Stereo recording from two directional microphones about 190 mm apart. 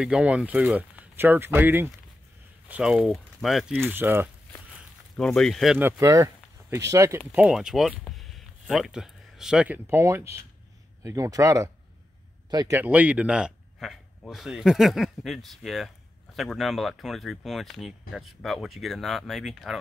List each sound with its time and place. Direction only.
0.0 s a man's voice: 5° right (ahead or behind)
5.1 s a man's voice: 5° left (ahead or behind)